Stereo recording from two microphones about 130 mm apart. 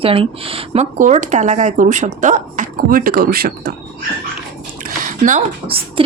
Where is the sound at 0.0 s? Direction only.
45° right (ahead or behind).